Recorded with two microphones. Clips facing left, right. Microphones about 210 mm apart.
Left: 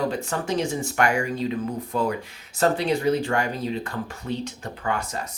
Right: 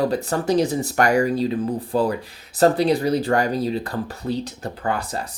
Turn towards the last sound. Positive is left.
turn(degrees=-35)  # may be behind; listen again after turning